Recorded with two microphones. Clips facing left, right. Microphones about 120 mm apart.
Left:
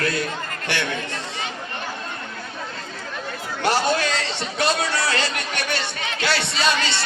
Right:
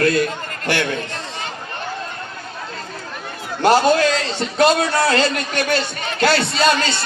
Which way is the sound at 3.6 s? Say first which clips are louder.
Right 7 dB; 40° right (ahead or behind).